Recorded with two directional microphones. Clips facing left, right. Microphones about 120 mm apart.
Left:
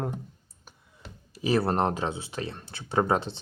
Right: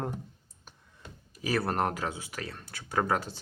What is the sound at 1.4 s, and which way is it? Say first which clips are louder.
Speech: left 4 dB; 25° left (ahead or behind).